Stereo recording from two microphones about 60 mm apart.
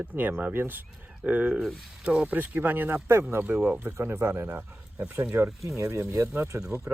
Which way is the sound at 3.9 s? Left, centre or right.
Right.